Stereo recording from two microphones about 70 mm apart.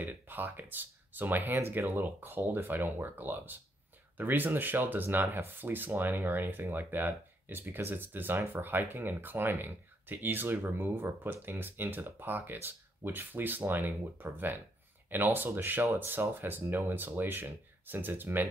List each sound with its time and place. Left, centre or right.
0.0 s speech: right